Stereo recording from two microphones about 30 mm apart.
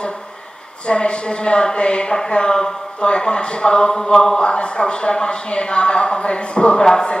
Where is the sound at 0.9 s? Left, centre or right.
Left.